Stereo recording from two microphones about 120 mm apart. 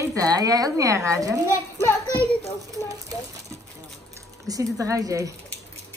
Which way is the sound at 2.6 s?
30° right (ahead or behind).